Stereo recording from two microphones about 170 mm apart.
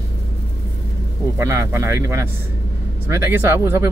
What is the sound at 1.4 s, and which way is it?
Speech, 15° right (ahead or behind).